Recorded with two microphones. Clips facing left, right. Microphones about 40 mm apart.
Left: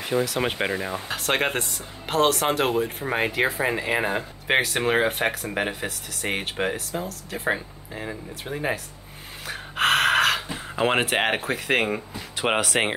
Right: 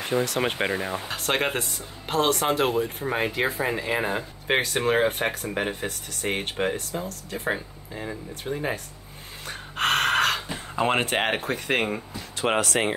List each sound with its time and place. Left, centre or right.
0.0 s speech: centre
3.6 s speech: centre
7.5 s speech: centre
9.5 s gasp: centre
10.8 s speech: centre